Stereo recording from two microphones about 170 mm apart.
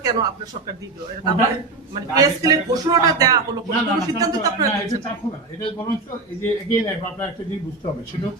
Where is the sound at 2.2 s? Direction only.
20° right (ahead or behind).